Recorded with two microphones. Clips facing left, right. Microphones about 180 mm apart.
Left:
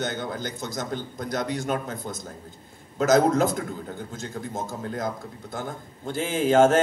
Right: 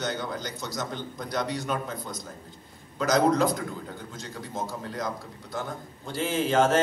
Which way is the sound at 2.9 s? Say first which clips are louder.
Left 3 dB; 50° left (ahead or behind).